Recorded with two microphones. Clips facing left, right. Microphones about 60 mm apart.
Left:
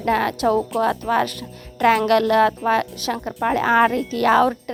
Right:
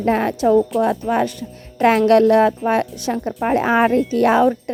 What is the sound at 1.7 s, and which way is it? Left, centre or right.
Speech, right.